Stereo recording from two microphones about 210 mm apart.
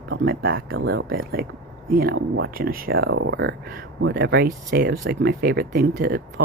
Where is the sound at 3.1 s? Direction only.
65° right (ahead or behind).